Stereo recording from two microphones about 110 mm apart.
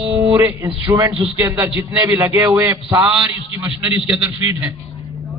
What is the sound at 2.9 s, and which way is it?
A man's voice, 15° right (ahead or behind).